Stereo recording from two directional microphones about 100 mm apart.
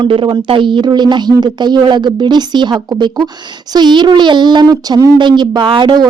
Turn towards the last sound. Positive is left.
turn(degrees=-55)  # may be behind; listen again after turning